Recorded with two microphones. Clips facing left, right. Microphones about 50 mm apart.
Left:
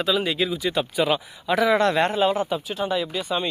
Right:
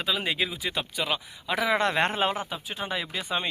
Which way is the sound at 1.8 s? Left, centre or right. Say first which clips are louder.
Left 5 dB; right.